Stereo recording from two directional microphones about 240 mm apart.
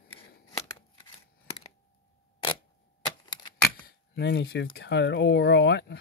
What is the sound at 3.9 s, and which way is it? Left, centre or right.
Speech, left.